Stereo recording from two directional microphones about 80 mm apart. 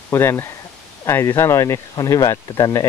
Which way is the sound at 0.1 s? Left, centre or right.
Left.